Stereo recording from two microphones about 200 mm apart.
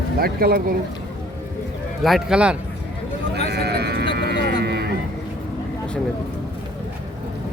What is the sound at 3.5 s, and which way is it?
Sheep, 55° right (ahead or behind).